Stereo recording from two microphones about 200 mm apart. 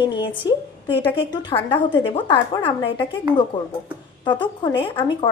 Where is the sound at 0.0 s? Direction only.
25° left (ahead or behind).